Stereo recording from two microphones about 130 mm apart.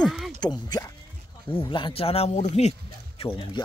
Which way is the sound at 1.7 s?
45° left (ahead or behind).